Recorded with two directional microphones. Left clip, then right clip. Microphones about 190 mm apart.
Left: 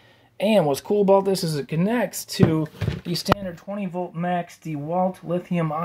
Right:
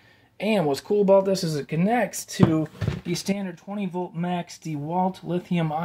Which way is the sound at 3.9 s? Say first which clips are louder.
Left 4 dB; 5° left (ahead or behind).